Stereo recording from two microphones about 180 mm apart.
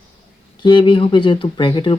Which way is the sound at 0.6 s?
25° left (ahead or behind).